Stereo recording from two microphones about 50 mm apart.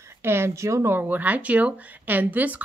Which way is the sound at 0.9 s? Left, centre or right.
Right.